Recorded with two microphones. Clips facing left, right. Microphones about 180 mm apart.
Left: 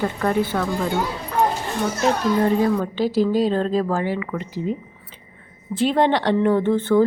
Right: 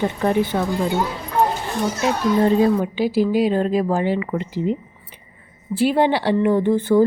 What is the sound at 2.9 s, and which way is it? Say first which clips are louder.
Speech: right 1 dB; 10° right (ahead or behind).